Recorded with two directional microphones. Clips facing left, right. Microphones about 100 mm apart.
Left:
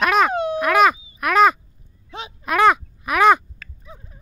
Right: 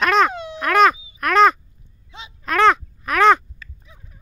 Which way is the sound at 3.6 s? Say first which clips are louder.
Left 3 dB; 50° left (ahead or behind).